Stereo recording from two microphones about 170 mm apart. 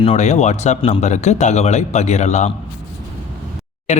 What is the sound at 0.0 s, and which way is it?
Speech, 40° left (ahead or behind).